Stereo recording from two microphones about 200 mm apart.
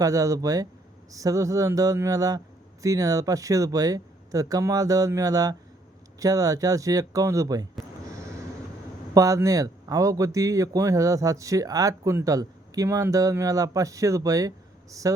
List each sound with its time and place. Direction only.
0.0 s a man's voice: 15° right (ahead or behind)
9.1 s a man's voice: 15° right (ahead or behind)